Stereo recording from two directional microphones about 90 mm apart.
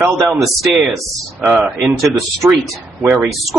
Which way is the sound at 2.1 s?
Centre (ahead or behind).